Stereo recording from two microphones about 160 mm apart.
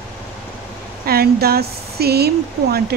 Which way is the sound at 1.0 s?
75° right (ahead or behind).